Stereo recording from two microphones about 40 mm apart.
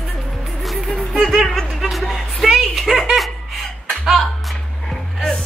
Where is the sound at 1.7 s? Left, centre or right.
Centre.